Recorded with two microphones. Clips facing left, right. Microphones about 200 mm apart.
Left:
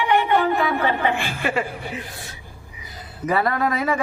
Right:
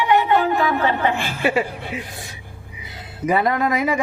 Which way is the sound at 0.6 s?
45° right (ahead or behind).